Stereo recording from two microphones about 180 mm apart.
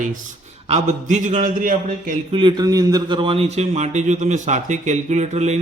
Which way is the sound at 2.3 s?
25° right (ahead or behind).